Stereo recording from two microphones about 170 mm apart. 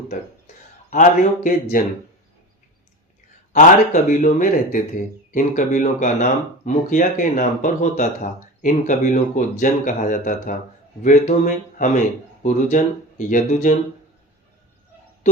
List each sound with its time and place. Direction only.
0.1 s speech: 50° left (ahead or behind)
3.5 s speech: 45° left (ahead or behind)